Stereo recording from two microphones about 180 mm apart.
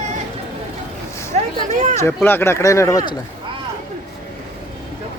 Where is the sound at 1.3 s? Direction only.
40° right (ahead or behind).